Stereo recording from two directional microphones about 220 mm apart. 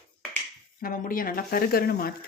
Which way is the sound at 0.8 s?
40° left (ahead or behind).